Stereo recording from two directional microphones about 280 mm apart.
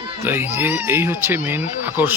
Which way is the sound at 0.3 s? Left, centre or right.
Centre.